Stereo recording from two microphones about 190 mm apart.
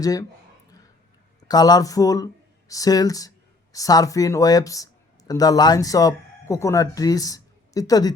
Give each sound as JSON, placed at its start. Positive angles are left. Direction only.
{"t": 0.0, "sound": "speech", "side_deg": 20}
{"t": 1.5, "sound": "speech", "side_deg": 20}